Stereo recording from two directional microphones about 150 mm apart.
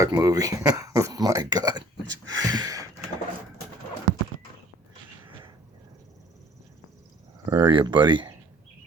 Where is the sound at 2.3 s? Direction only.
25° right (ahead or behind).